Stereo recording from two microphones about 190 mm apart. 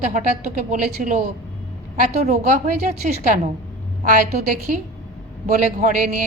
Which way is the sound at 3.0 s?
40° right (ahead or behind).